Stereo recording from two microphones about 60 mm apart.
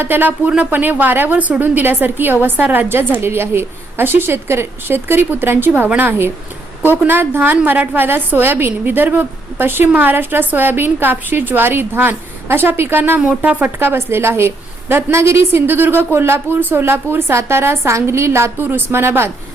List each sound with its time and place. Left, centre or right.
0.0 s a woman's voice: right
13.1 s speech: right
13.7 s a woman's voice: right